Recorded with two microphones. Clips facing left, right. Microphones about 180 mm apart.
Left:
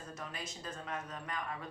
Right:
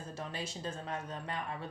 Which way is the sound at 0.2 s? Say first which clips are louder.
Right 7 dB; 30° right (ahead or behind).